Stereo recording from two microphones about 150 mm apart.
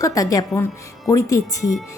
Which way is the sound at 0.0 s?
20° left (ahead or behind).